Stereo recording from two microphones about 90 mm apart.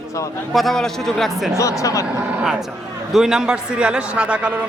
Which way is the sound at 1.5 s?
35° left (ahead or behind).